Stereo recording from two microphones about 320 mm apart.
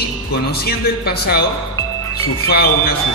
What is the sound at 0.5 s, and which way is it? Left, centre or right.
Speech, left.